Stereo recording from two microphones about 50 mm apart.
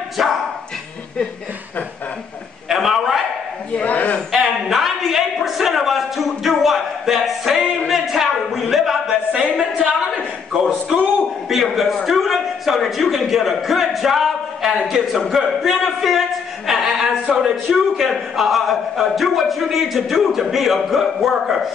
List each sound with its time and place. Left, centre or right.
0.2 s a man's voice: centre
2.7 s a man's voice: centre
3.7 s a man's voice: left
4.3 s a sound: centre
9.3 s speech: centre
11.4 s a sound: centre
15.1 s a man's voice: centre